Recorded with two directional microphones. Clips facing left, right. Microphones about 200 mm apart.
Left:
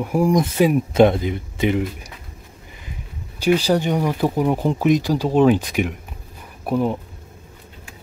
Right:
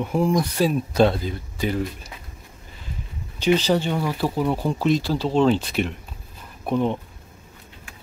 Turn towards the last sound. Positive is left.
turn(degrees=5)  # may be behind; listen again after turning